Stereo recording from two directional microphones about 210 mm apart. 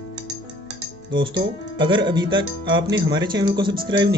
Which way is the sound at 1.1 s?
25° right (ahead or behind).